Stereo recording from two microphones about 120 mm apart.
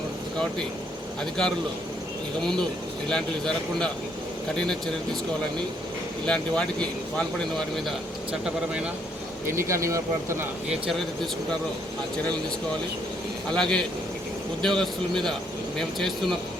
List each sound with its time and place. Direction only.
1.2 s speech: 5° left (ahead or behind)
6.2 s speech: 10° left (ahead or behind)
8.3 s speech: 10° right (ahead or behind)
9.5 s speech: 25° right (ahead or behind)
10.7 s speech: centre (ahead or behind)
13.5 s speech: 5° left (ahead or behind)